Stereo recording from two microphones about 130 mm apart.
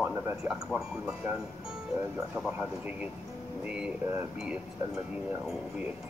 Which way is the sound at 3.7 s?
5° right (ahead or behind).